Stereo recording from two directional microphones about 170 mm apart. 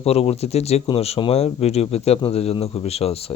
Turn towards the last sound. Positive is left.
turn(degrees=35)  # may be behind; listen again after turning